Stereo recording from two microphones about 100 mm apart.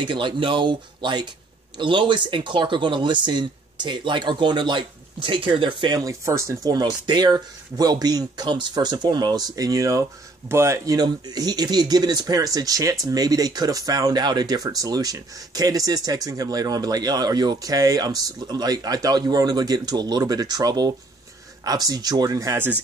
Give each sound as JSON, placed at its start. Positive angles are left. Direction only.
{"t": 0.0, "sound": "speech", "side_deg": -50}
{"t": 5.9, "sound": "speech", "side_deg": -30}
{"t": 11.0, "sound": "speech", "side_deg": -40}